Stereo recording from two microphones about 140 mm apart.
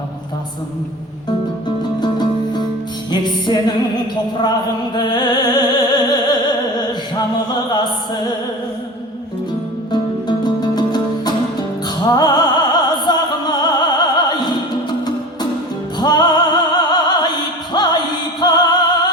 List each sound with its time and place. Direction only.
2.0 s music: 30° left (ahead or behind)
9.9 s music: 30° left (ahead or behind)
16.0 s music: 30° left (ahead or behind)